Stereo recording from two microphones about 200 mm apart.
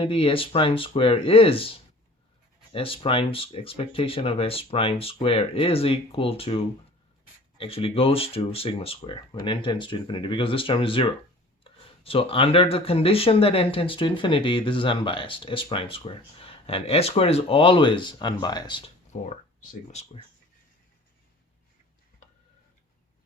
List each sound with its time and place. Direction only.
0.0 s speech: 30° left (ahead or behind)
19.1 s speech: 40° left (ahead or behind)